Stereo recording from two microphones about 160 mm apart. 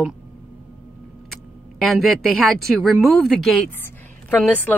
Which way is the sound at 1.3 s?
Centre (ahead or behind).